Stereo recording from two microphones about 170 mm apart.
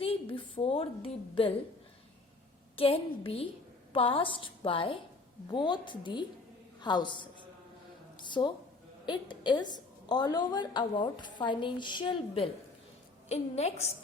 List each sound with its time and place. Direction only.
0.0 s a woman's voice: 30° left (ahead or behind)
2.7 s a woman's voice: 35° left (ahead or behind)